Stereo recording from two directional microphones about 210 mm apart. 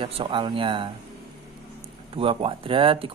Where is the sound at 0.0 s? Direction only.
25° right (ahead or behind).